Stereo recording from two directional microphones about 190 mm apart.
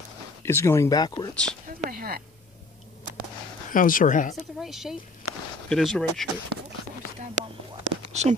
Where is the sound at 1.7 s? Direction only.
50° right (ahead or behind).